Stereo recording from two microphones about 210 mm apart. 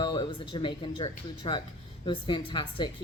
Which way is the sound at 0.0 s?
20° left (ahead or behind).